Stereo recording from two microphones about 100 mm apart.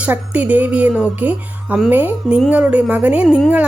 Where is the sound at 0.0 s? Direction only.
15° right (ahead or behind).